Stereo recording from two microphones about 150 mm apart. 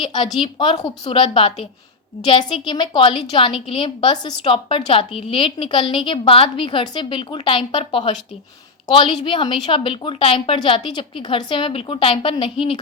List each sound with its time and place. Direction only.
0.0 s a woman's voice: 30° left (ahead or behind)
0.8 s a woman's voice: 25° left (ahead or behind)